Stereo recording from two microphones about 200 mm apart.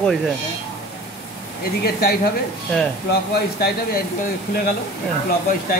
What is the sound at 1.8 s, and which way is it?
Speech, 50° left (ahead or behind).